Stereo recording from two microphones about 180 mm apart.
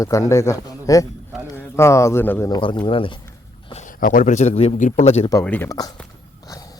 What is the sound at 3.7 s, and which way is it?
Speech, 45° left (ahead or behind).